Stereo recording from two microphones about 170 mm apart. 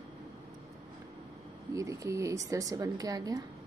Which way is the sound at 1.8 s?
20° right (ahead or behind).